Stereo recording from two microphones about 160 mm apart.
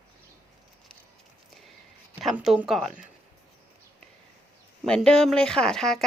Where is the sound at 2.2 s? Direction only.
5° right (ahead or behind).